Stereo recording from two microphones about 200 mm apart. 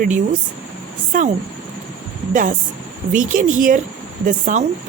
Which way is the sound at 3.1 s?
40° right (ahead or behind).